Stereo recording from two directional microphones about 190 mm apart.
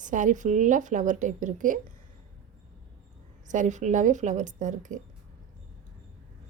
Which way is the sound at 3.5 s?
40° right (ahead or behind).